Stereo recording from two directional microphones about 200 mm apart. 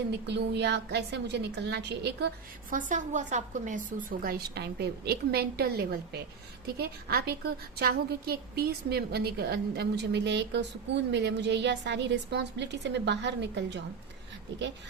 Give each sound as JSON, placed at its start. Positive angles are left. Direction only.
{"t": 0.1, "sound": "a woman's voice", "side_deg": -60}